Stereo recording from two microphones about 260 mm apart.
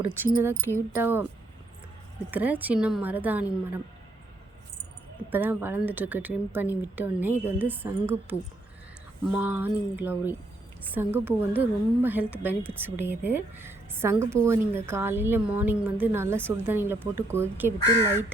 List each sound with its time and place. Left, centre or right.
0.0 s speech: centre
2.3 s speech: centre
5.3 s speech: centre
17.8 s speech: centre